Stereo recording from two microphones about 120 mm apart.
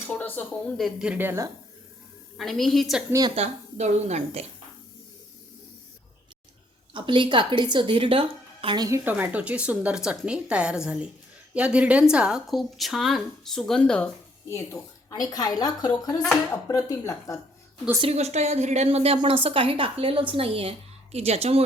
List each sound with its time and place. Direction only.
0.1 s speech: 15° left (ahead or behind)
0.8 s speech: 5° right (ahead or behind)
2.4 s speech: centre (ahead or behind)
3.1 s a woman's voice: 30° right (ahead or behind)
3.3 s a woman's voice: 65° right (ahead or behind)
6.9 s a woman's voice: 45° right (ahead or behind)
9.0 s speech: 15° right (ahead or behind); by 14.1 s 5° left (ahead or behind)
14.5 s speech: 30° left (ahead or behind)
18.0 s a woman's voice: 60° right (ahead or behind)